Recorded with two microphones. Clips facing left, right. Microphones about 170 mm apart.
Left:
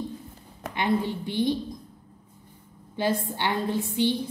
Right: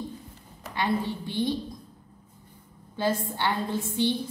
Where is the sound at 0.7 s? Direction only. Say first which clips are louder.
Left 2 dB; 20° left (ahead or behind).